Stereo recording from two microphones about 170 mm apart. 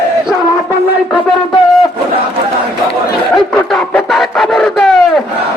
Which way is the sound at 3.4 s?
Centre (ahead or behind).